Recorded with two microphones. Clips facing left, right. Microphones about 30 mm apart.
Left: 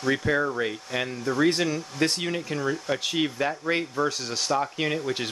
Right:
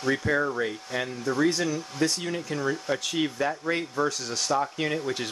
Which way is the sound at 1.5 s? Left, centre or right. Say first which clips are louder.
Left 2 dB; left.